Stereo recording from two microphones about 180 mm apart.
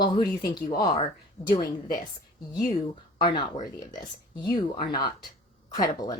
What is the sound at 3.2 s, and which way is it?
Speech, 25° left (ahead or behind).